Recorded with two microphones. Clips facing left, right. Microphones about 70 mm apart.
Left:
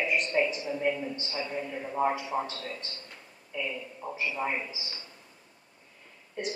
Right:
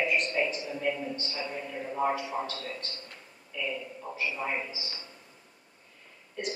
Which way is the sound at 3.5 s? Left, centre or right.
Left.